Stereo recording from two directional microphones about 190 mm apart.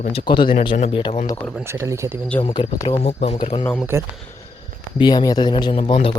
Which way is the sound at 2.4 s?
25° left (ahead or behind).